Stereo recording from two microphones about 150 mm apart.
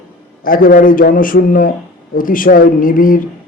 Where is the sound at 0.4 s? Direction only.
70° left (ahead or behind).